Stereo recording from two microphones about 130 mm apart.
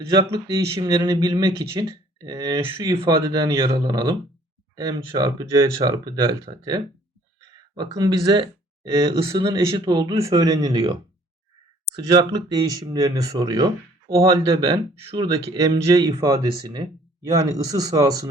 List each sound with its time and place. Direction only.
0.5 s speech: 30° right (ahead or behind)
3.6 s speech: 40° right (ahead or behind)
12.1 s speech: 30° right (ahead or behind)